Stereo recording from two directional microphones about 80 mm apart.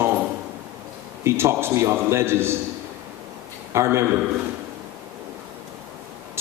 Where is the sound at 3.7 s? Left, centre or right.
Right.